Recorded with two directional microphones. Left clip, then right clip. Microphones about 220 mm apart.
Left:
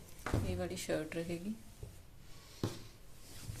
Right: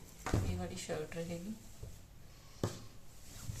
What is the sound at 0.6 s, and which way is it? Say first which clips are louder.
Speech: left 3 dB; 50° left (ahead or behind).